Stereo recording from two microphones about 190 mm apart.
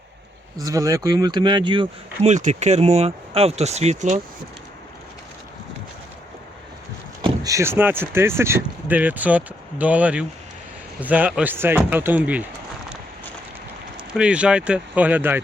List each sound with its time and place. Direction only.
0.6 s speech: 15° right (ahead or behind)
2.3 s speech: 40° right (ahead or behind)
7.2 s vehicle: 25° right (ahead or behind)
7.5 s speech: 15° right (ahead or behind)
13.9 s speech: 5° right (ahead or behind)